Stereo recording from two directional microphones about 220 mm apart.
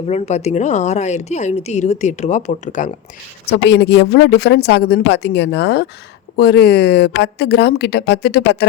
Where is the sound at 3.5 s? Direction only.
50° left (ahead or behind).